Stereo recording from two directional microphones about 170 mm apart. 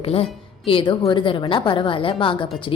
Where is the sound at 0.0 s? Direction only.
35° left (ahead or behind).